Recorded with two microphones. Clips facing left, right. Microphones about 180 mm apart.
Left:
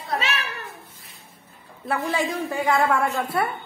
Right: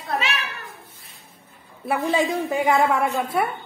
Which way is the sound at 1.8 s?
20° right (ahead or behind).